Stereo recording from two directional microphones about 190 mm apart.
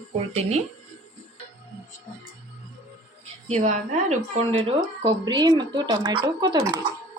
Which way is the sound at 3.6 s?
35° right (ahead or behind).